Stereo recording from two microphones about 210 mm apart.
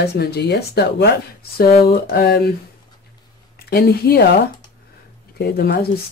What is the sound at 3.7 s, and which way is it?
Speech, 45° left (ahead or behind).